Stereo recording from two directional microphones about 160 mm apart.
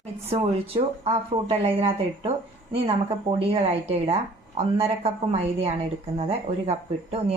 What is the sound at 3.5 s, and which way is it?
Speech, 40° right (ahead or behind).